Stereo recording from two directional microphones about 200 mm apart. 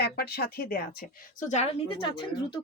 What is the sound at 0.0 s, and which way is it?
Speech, 50° left (ahead or behind).